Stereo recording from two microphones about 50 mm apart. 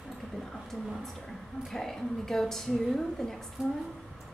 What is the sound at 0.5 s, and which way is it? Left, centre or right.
A woman's voice, centre.